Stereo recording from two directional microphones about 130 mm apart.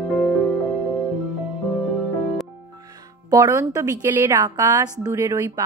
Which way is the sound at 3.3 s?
25° right (ahead or behind).